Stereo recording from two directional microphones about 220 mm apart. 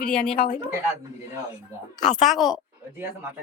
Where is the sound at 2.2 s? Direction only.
Centre (ahead or behind).